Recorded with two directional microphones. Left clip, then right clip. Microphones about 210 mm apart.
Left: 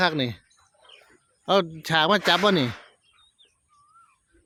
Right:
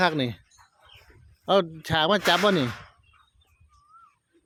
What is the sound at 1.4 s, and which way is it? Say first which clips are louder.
Speech: even; centre (ahead or behind).